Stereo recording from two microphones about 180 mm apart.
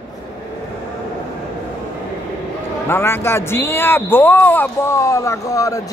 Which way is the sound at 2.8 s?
15° left (ahead or behind).